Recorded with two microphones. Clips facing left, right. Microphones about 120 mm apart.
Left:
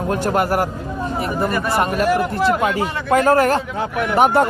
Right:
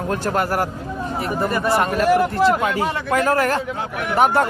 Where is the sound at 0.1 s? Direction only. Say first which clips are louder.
Left 3 dB; 15° left (ahead or behind).